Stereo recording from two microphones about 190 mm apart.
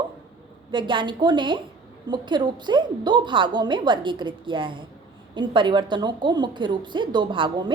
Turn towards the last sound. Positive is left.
turn(degrees=-25)  # may be behind; listen again after turning